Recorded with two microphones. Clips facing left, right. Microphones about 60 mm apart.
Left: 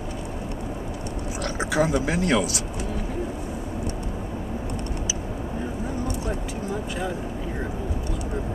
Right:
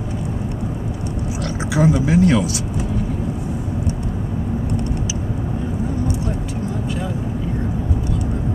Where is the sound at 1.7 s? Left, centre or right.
Centre.